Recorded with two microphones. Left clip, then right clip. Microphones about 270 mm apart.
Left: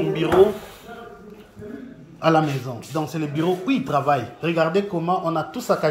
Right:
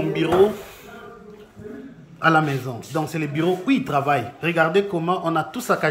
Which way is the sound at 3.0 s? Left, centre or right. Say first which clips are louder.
Right 1 dB; centre.